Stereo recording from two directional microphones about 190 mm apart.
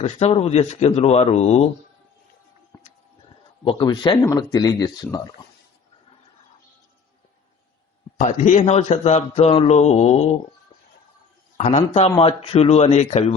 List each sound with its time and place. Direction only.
0.0 s speech: 35° left (ahead or behind)
3.6 s speech: 25° left (ahead or behind)
8.2 s speech: 40° left (ahead or behind)
11.5 s speech: 35° left (ahead or behind)